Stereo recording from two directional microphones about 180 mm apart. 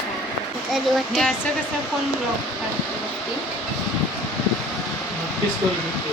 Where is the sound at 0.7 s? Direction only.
Centre (ahead or behind).